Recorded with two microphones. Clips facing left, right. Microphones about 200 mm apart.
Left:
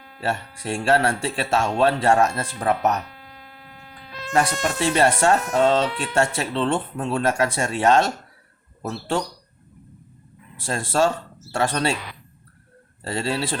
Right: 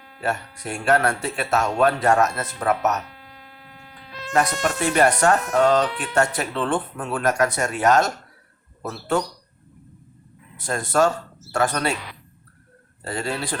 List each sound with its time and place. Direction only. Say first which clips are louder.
0.2 s speech: even; 30° left (ahead or behind)
4.3 s speech: even; 30° left (ahead or behind)
10.6 s speech: right 1 dB; 30° left (ahead or behind)
13.1 s speech: left 2 dB; 30° left (ahead or behind)